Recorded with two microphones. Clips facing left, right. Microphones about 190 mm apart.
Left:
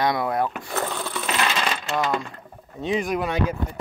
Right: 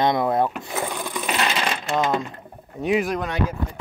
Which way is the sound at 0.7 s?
10° right (ahead or behind).